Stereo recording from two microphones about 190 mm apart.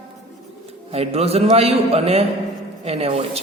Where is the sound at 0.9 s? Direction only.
30° right (ahead or behind).